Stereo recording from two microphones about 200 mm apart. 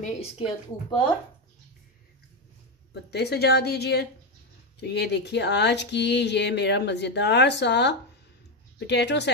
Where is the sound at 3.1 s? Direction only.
55° left (ahead or behind).